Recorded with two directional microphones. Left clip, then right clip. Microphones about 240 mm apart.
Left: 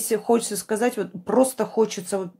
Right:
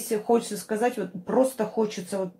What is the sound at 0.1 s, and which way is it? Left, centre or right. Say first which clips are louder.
Speech: left 2 dB; left.